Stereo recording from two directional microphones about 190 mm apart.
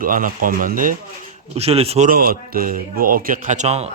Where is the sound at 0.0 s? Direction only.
45° right (ahead or behind).